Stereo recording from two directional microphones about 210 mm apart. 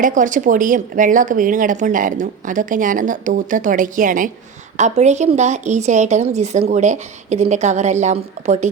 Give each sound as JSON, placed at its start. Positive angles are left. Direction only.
{"t": 0.0, "sound": "speech", "side_deg": -40}